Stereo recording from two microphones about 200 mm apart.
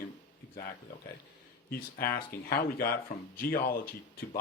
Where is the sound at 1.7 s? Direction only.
50° left (ahead or behind).